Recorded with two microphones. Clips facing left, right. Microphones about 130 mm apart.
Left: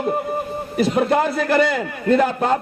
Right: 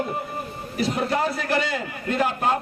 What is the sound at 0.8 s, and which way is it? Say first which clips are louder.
A man's voice: left 6 dB; 55° left (ahead or behind).